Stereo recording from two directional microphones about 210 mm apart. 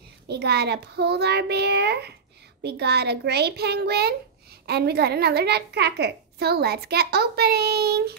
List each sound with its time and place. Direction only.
0.3 s a woman's voice: 50° right (ahead or behind)